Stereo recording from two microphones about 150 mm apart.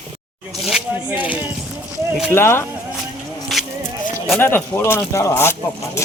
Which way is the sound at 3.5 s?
Centre (ahead or behind).